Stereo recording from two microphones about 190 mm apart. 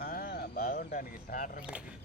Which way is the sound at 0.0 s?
55° left (ahead or behind).